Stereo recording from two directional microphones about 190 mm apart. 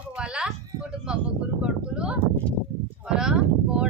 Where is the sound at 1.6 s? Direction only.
5° right (ahead or behind).